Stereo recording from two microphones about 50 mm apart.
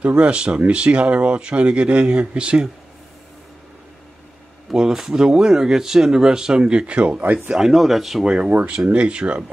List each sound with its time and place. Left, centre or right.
0.0 s speech: right
4.7 s speech: centre
7.5 s speech: centre
8.5 s speech: right